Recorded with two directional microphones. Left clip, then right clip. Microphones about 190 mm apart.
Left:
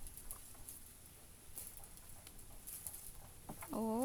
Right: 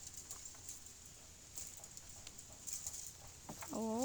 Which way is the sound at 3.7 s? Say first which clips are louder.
Left 1 dB; 15° left (ahead or behind).